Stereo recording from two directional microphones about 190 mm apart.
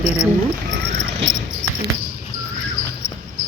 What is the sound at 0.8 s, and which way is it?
Cricket, 65° right (ahead or behind).